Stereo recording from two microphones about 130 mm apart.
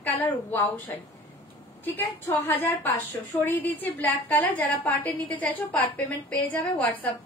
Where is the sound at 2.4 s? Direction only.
15° left (ahead or behind).